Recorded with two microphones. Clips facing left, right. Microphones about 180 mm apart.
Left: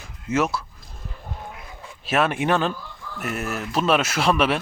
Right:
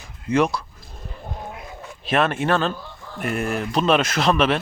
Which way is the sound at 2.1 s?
10° left (ahead or behind).